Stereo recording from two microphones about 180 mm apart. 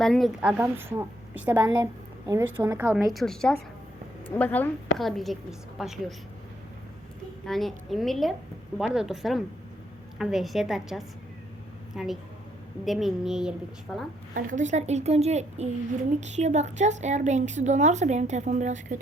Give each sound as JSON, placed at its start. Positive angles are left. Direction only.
{"t": 0.0, "sound": "a woman's voice", "side_deg": 0}
{"t": 7.4, "sound": "a woman's voice", "side_deg": 0}
{"t": 14.3, "sound": "a woman's voice", "side_deg": -45}